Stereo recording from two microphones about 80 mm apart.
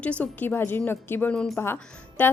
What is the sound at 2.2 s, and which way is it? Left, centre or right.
Speech, left.